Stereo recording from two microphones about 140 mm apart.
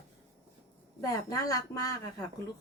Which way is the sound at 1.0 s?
25° left (ahead or behind).